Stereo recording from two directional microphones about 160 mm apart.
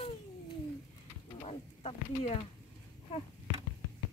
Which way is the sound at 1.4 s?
40° left (ahead or behind).